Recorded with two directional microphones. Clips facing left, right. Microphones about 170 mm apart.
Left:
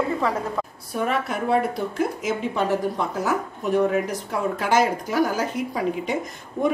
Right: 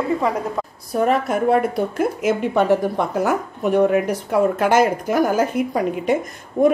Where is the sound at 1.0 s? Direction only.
45° right (ahead or behind).